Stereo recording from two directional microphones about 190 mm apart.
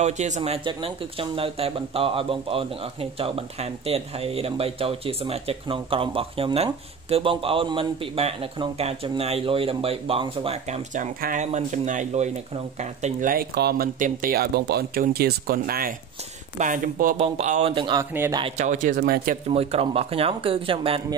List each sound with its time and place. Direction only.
0.0 s speech: 35° right (ahead or behind)
11.1 s speech: 45° right (ahead or behind); by 18.0 s 25° right (ahead or behind)
18.1 s a man's voice: 10° right (ahead or behind)
18.4 s speech: 40° right (ahead or behind)
19.5 s speech: 30° right (ahead or behind)